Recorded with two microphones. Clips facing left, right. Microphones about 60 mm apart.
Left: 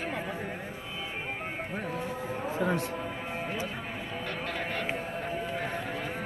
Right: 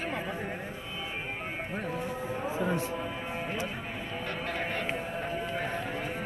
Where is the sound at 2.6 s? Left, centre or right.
Left.